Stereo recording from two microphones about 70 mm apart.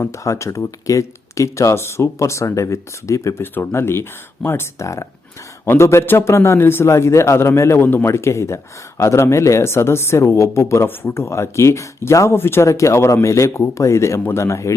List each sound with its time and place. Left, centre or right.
0.0 s speech: left
3.4 s a man's voice: left